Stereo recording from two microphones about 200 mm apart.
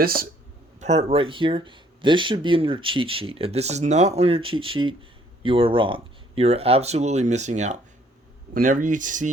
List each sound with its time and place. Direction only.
0.0 s speech: 50° right (ahead or behind)
0.8 s speech: 35° right (ahead or behind)